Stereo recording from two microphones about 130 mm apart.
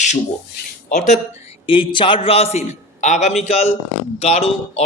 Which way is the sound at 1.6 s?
40° left (ahead or behind).